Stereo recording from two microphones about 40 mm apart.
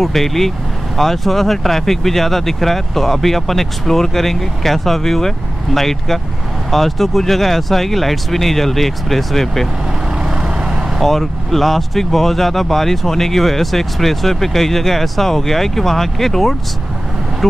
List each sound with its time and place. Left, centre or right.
0.0 s speech: centre
10.2 s vehicle: right
11.0 s speech: centre